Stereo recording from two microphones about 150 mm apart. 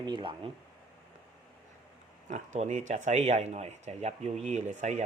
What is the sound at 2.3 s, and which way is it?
Speech, 50° right (ahead or behind).